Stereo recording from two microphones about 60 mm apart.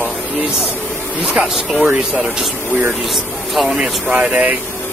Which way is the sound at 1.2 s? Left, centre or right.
Centre.